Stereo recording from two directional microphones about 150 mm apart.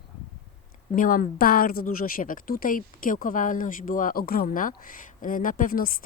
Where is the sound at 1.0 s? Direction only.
65° left (ahead or behind).